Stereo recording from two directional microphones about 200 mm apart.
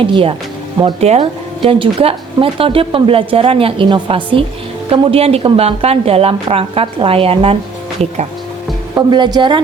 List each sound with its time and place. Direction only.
0.0 s speech: 25° right (ahead or behind)
9.0 s speech: 20° right (ahead or behind)